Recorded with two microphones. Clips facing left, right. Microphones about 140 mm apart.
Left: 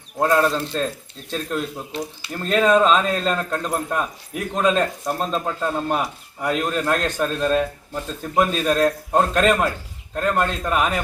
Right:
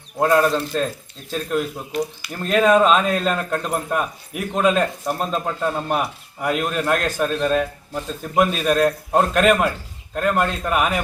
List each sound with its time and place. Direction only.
0.2 s speech: 5° right (ahead or behind)
1.9 s speech: 25° left (ahead or behind)
2.3 s speech: 5° right (ahead or behind)